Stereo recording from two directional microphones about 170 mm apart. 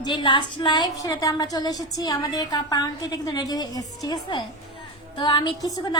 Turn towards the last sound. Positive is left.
turn(degrees=20)  # may be behind; listen again after turning